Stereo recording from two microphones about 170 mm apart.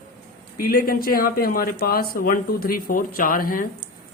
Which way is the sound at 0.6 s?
60° left (ahead or behind).